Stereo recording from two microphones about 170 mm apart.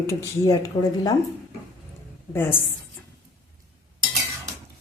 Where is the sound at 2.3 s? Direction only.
15° left (ahead or behind).